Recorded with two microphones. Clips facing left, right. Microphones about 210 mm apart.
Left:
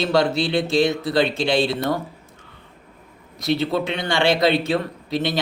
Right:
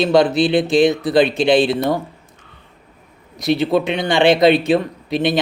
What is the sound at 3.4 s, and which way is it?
Speech, 15° right (ahead or behind).